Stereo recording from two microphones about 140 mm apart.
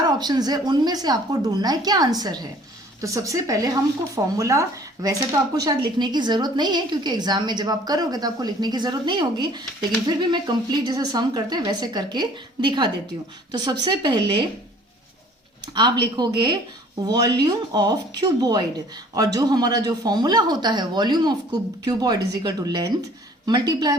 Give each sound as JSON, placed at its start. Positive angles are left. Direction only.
{"t": 0.1, "sound": "a woman's voice", "side_deg": -30}
{"t": 15.6, "sound": "a woman's voice", "side_deg": -30}